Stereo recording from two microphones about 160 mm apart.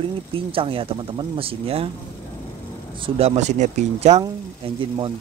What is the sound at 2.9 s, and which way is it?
Speech, 35° right (ahead or behind).